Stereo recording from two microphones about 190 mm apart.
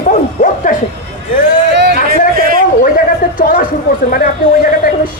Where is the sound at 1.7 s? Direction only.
55° right (ahead or behind).